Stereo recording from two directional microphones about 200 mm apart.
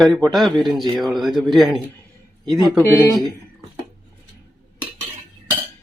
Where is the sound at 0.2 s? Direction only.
Centre (ahead or behind).